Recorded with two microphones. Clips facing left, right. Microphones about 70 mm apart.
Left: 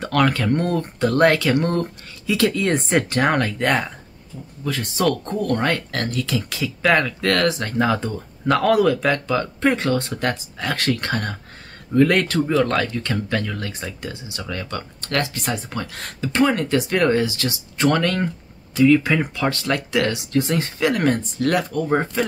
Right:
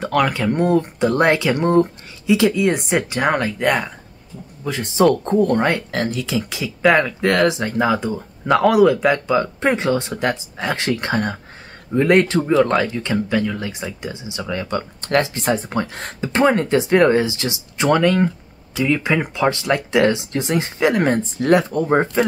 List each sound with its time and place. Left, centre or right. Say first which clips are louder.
0.0 s speech: right 1 dB; centre
4.6 s speech: right 5 dB; right